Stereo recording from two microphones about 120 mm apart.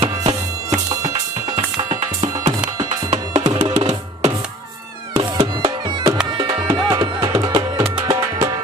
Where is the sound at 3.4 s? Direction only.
40° right (ahead or behind).